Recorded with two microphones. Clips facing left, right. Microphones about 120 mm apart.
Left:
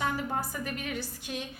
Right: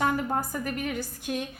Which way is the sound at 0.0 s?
45° right (ahead or behind).